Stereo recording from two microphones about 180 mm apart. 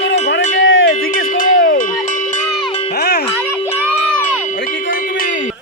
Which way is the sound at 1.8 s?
45° left (ahead or behind).